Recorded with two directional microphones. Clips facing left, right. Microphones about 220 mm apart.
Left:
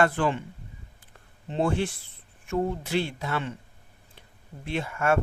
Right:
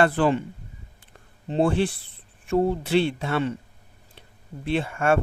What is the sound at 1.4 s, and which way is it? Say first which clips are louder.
Speech: right 4 dB; 35° right (ahead or behind).